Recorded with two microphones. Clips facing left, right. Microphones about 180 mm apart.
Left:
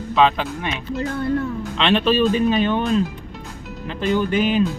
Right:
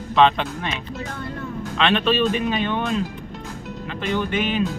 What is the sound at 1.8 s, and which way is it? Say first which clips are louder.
Speech: left 2 dB; 30° left (ahead or behind).